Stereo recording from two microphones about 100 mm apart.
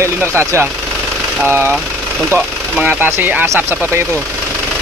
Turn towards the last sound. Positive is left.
turn(degrees=-25)  # may be behind; listen again after turning